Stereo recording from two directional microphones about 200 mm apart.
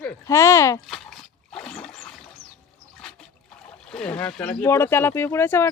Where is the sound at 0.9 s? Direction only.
Centre (ahead or behind).